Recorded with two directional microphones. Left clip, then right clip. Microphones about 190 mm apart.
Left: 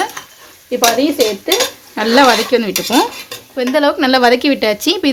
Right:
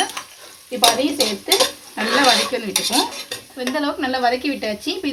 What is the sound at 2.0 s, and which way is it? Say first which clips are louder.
Speech: left 6 dB; 50° left (ahead or behind).